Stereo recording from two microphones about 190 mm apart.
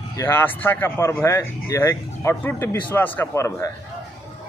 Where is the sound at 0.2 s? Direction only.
10° left (ahead or behind).